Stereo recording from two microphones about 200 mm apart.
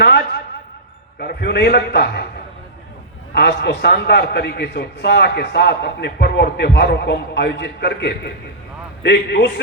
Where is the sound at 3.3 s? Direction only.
55° left (ahead or behind).